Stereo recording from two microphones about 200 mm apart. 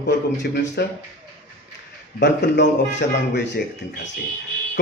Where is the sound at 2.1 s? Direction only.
60° left (ahead or behind).